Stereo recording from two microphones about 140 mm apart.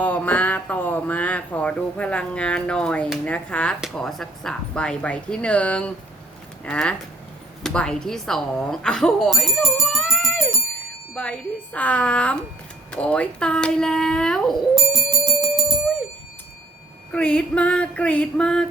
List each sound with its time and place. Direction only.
0.0 s speech: 10° left (ahead or behind)
10.0 s music: centre (ahead or behind)
11.1 s speech: 10° left (ahead or behind)
15.2 s music: 30° right (ahead or behind)
17.1 s speech: 10° left (ahead or behind)